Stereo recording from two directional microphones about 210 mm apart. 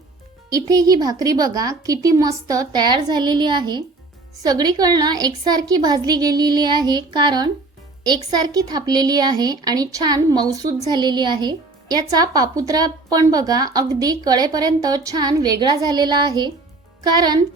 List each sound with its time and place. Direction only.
0.5 s a woman's voice: 15° right (ahead or behind)